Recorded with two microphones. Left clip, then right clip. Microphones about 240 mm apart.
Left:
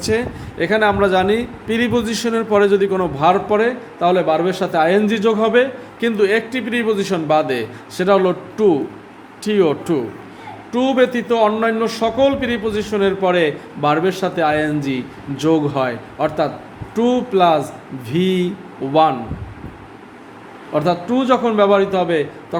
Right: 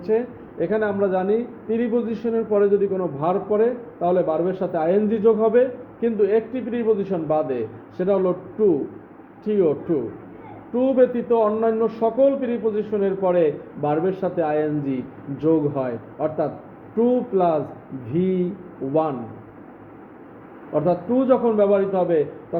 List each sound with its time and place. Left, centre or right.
0.1 s a man's voice: left
20.7 s a man's voice: left